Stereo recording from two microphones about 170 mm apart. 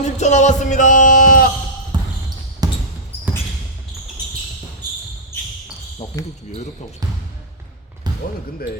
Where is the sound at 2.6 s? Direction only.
20° right (ahead or behind).